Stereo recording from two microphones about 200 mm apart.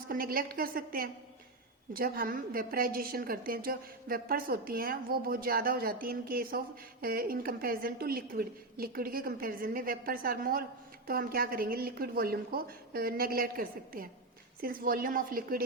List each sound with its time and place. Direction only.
0.1 s a woman's voice: 45° right (ahead or behind)